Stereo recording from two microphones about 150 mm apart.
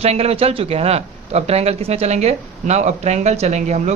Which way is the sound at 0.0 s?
45° right (ahead or behind).